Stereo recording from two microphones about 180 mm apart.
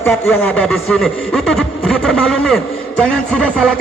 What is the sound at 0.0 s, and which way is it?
Speech, 10° left (ahead or behind).